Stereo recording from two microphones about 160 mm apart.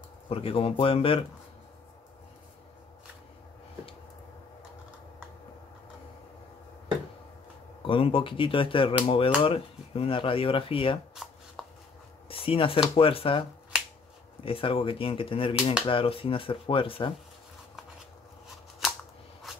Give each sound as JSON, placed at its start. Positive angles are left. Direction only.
{"t": 0.3, "sound": "speech", "side_deg": 35}
{"t": 7.8, "sound": "speech", "side_deg": 35}
{"t": 11.6, "sound": "a sound", "side_deg": 0}
{"t": 12.3, "sound": "speech", "side_deg": 35}